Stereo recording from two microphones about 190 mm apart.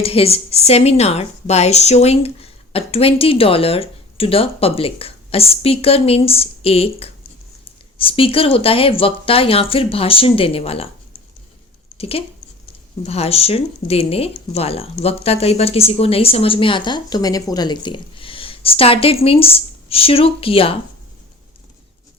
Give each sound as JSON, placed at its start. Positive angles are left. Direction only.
{"t": 0.0, "sound": "a woman's voice", "side_deg": 30}
{"t": 11.9, "sound": "speech", "side_deg": 30}